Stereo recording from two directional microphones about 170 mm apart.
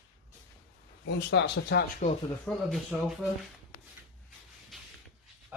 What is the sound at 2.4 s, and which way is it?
Speech, centre (ahead or behind).